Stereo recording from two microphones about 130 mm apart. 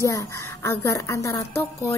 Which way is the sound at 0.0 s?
25° left (ahead or behind).